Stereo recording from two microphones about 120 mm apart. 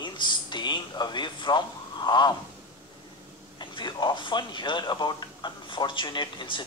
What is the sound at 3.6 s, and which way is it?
Speech, 40° left (ahead or behind).